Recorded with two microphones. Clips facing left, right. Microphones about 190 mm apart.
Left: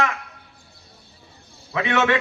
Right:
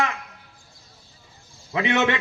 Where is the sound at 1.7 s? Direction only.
20° right (ahead or behind).